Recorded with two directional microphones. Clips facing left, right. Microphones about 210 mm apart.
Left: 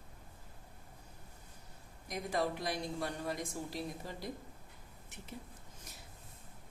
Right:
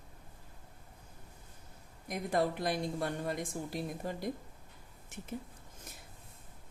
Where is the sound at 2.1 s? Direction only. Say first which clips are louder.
Right 3 dB; 55° right (ahead or behind).